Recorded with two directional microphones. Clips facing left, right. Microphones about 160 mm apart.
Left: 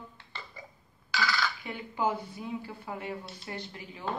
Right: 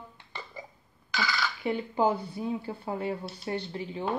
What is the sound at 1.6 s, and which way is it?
Speech, 35° right (ahead or behind).